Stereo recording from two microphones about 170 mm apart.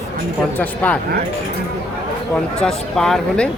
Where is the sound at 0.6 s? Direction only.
10° left (ahead or behind).